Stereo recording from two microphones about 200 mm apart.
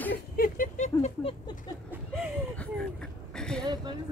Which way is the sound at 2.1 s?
5° left (ahead or behind).